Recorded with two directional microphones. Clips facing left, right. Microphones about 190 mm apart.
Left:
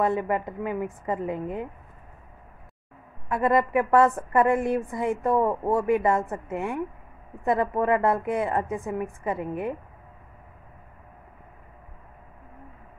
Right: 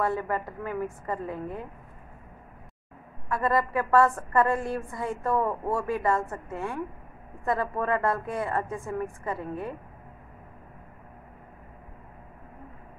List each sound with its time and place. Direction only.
0.0 s a woman's voice: 20° left (ahead or behind)
3.3 s a woman's voice: 20° left (ahead or behind)